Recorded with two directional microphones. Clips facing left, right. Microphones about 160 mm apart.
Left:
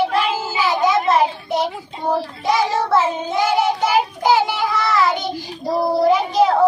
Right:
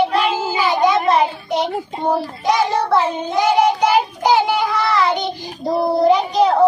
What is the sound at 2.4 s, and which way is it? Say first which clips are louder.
Child singing: right 2 dB; centre (ahead or behind).